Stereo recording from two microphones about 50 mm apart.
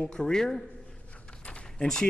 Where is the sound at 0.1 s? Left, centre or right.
Centre.